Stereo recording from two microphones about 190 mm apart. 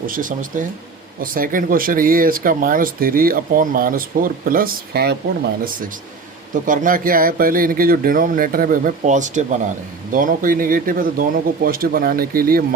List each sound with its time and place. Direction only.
0.0 s speech: 45° right (ahead or behind)
6.5 s speech: 45° right (ahead or behind)